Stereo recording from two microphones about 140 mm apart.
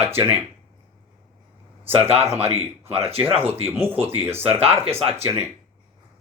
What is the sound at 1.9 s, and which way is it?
Speech, 45° right (ahead or behind).